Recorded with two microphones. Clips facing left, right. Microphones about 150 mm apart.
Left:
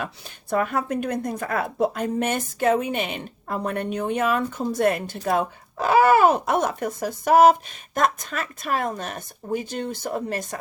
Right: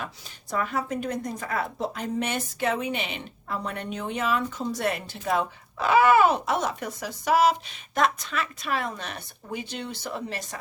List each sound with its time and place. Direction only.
0.5 s a woman's voice: 55° left (ahead or behind)